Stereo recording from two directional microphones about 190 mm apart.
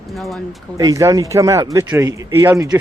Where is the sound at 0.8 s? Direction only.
20° right (ahead or behind).